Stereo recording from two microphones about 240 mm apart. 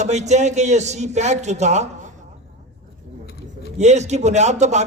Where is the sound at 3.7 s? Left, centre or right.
Right.